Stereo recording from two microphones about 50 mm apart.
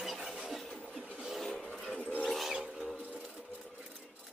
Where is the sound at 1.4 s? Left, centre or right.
Centre.